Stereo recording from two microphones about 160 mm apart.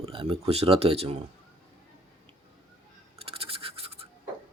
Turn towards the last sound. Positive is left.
turn(degrees=-35)  # may be behind; listen again after turning